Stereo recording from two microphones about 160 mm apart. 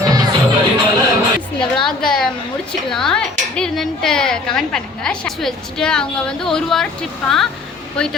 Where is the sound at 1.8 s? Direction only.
5° left (ahead or behind).